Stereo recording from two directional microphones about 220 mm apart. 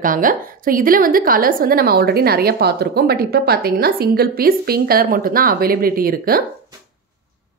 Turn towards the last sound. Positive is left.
turn(degrees=-40)  # may be behind; listen again after turning